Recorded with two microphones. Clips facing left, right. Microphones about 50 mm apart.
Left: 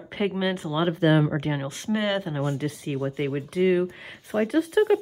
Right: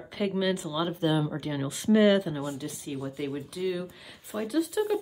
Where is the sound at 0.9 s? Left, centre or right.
Left.